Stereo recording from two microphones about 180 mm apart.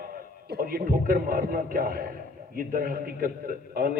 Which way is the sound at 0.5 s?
60° right (ahead or behind).